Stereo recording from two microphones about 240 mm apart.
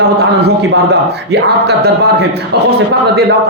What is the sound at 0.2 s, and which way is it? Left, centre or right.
A man's voice, right.